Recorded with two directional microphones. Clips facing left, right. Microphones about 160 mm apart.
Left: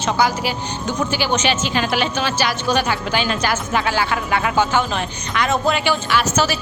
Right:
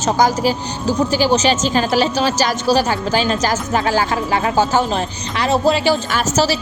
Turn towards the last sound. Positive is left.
turn(degrees=-35)  # may be behind; listen again after turning